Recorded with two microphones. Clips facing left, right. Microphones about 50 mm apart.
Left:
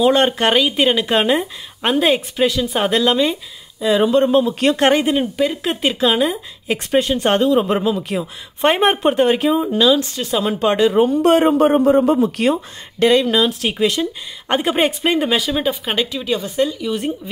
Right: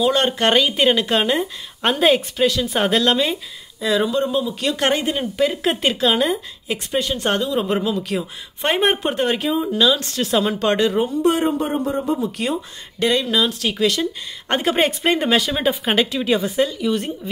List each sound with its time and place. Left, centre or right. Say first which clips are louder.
0.0 s speech: left 4 dB; left
0.5 s speech: left 1 dB; centre
1.9 s speech: even; centre
2.3 s speech: left 1 dB; centre
2.6 s speech: left 1 dB; centre
3.9 s speech: left 6 dB; left
4.7 s speech: left 3 dB; left
5.4 s speech: even; centre
6.7 s speech: left 5 dB; left
7.7 s speech: left 2 dB; centre
11.1 s a man's voice: left 5 dB; left
13.0 s speech: left 5 dB; left
14.5 s speech: left 2 dB; centre